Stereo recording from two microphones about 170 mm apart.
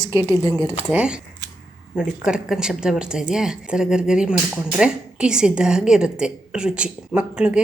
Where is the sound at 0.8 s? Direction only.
5° right (ahead or behind).